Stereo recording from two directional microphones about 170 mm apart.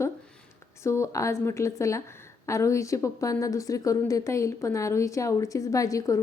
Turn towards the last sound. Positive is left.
turn(degrees=20)  # may be behind; listen again after turning